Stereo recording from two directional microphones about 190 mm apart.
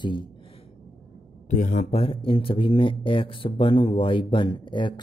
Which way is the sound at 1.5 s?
40° left (ahead or behind).